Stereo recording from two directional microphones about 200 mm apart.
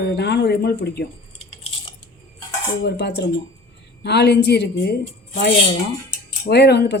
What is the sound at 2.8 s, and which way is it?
Speech, 55° left (ahead or behind).